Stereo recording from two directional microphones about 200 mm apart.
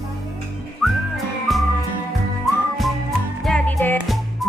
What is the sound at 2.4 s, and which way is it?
Whistling, centre (ahead or behind).